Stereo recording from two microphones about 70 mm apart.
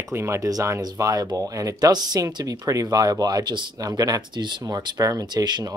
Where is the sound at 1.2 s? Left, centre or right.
Right.